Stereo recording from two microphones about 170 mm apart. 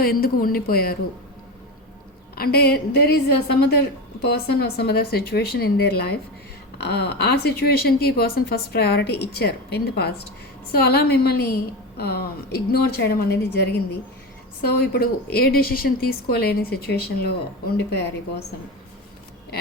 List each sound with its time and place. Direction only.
0.0 s speech: 60° left (ahead or behind)
2.3 s a woman's voice: 65° left (ahead or behind)